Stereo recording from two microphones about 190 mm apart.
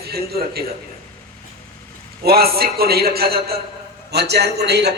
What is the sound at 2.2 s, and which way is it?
A man's voice, 55° right (ahead or behind).